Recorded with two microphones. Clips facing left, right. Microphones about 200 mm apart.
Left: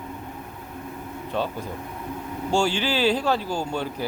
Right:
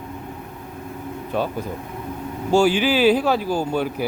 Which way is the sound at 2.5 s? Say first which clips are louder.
Right 6 dB; 5° right (ahead or behind).